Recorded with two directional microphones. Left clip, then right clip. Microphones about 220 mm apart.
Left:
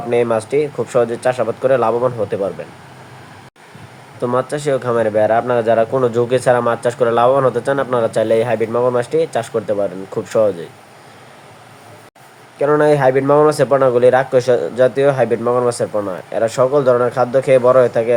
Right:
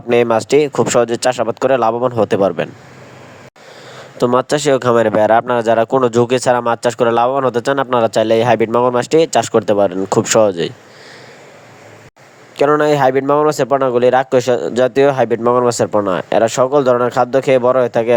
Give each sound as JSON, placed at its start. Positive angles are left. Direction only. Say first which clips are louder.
{"t": 0.1, "sound": "speech", "louder": "right 4 dB", "side_deg": -45}
{"t": 4.2, "sound": "speech", "louder": "right 4 dB", "side_deg": -40}
{"t": 12.5, "sound": "speech", "louder": "right 1 dB", "side_deg": -40}